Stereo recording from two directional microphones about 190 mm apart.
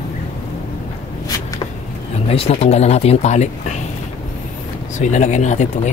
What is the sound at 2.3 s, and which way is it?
Speech, 30° left (ahead or behind).